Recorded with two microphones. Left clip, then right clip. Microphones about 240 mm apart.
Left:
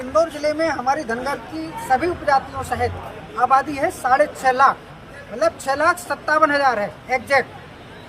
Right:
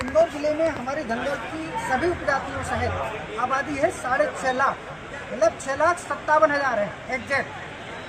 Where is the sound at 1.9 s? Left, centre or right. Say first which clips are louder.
Left 6 dB; left.